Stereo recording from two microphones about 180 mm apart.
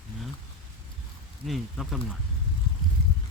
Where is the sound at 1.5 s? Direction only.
Centre (ahead or behind).